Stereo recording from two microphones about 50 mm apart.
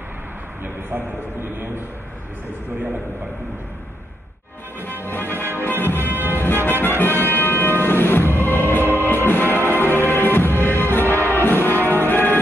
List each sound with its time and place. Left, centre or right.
0.8 s a man's voice: right
4.7 s music: left